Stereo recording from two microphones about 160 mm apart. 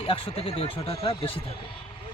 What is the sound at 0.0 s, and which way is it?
Speech, 35° left (ahead or behind).